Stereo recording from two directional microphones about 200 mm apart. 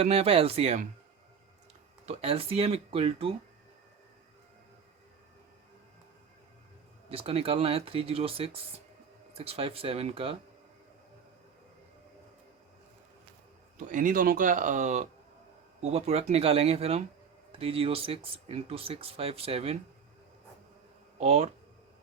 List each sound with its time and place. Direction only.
0.0 s speech: 30° right (ahead or behind)
2.0 s speech: 30° right (ahead or behind)
7.1 s speech: 30° right (ahead or behind)
13.7 s speech: 40° right (ahead or behind)
21.2 s speech: 30° right (ahead or behind)